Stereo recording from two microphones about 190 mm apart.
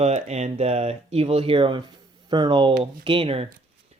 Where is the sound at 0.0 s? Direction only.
35° right (ahead or behind).